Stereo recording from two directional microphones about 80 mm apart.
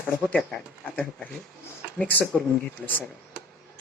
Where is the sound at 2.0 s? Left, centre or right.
Left.